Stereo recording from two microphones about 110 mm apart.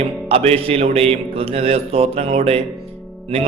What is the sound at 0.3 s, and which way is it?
A man's voice, 60° right (ahead or behind).